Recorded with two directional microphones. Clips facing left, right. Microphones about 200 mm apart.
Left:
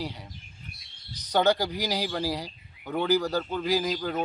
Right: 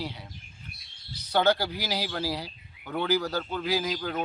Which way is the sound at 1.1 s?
15° left (ahead or behind).